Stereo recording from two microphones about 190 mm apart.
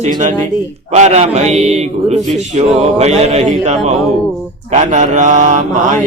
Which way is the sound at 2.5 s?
35° right (ahead or behind).